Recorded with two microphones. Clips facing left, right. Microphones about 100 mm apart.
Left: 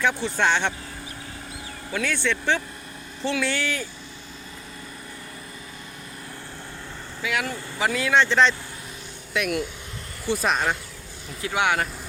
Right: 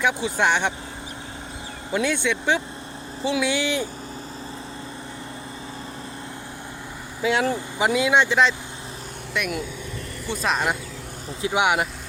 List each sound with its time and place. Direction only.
0.0 s speech: 10° right (ahead or behind)
1.9 s speech: 20° right (ahead or behind)
7.2 s speech: 30° right (ahead or behind); by 10.8 s 5° right (ahead or behind)
11.4 s speech: 15° right (ahead or behind)